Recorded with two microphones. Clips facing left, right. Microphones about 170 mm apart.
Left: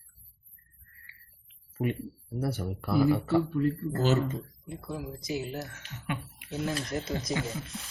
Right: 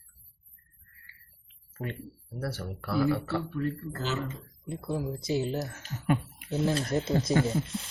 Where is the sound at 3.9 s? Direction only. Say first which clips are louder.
Left 7 dB; 45° left (ahead or behind).